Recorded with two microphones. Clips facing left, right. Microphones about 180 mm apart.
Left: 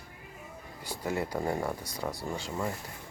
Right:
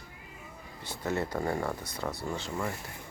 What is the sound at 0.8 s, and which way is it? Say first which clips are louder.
Speech: right 1 dB; 10° left (ahead or behind).